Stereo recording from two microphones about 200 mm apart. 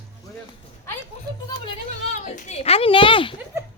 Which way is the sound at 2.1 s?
35° left (ahead or behind).